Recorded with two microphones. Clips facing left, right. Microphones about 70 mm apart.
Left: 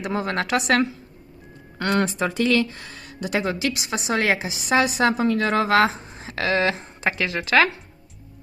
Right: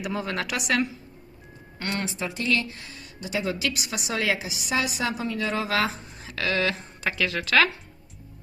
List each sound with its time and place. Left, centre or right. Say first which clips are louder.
0.3 s a woman's voice: left 7 dB; left
2.0 s speech: left 10 dB; left
3.5 s a woman's voice: left 4 dB; left
5.9 s speech: left 4 dB; left